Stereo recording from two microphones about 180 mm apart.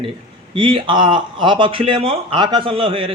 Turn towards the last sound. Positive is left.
turn(degrees=-30)  # may be behind; listen again after turning